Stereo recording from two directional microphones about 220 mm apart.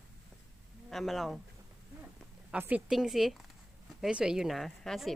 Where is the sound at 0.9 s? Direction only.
Centre (ahead or behind).